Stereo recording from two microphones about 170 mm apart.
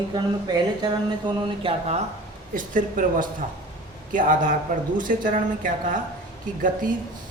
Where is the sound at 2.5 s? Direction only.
50° right (ahead or behind).